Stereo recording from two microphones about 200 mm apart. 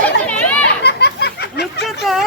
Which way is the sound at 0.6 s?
55° left (ahead or behind).